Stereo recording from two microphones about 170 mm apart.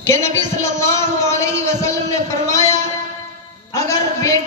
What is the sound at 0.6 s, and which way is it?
A man's voice, 15° left (ahead or behind).